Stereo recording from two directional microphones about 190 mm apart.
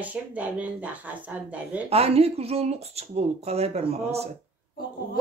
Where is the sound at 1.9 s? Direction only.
30° right (ahead or behind).